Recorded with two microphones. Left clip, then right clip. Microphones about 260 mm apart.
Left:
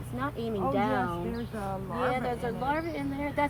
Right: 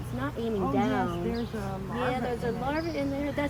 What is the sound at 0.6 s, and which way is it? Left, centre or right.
Speech, centre.